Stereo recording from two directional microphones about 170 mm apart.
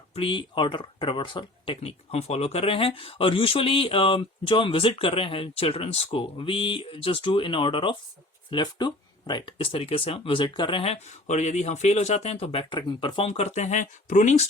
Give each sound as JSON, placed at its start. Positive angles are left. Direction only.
{"t": 0.1, "sound": "speech", "side_deg": 30}